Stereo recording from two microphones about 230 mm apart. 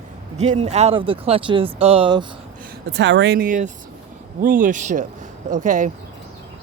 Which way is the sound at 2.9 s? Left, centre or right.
Right.